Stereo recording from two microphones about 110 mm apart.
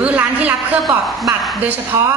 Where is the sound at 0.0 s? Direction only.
15° right (ahead or behind).